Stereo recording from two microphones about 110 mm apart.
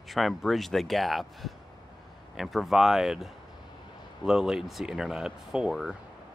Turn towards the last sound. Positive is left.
turn(degrees=-5)  # may be behind; listen again after turning